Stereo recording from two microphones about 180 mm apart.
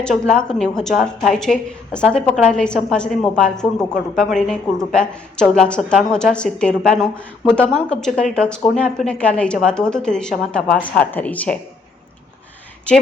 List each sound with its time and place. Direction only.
0.0 s a woman's voice: 5° left (ahead or behind)